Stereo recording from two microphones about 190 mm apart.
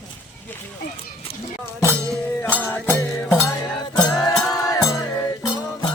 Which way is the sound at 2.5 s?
10° left (ahead or behind).